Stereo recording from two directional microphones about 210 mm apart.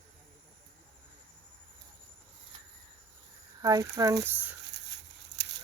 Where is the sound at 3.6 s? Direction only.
15° right (ahead or behind).